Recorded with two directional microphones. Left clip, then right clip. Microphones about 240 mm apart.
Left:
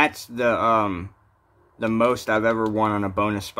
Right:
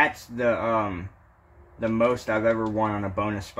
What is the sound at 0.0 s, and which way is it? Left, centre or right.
Speech, centre.